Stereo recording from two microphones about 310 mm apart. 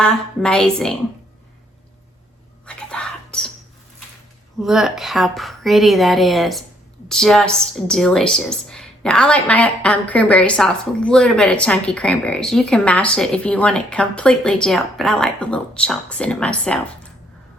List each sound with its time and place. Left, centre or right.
0.0 s a woman's voice: centre
2.6 s whispering: centre
4.6 s a woman's voice: centre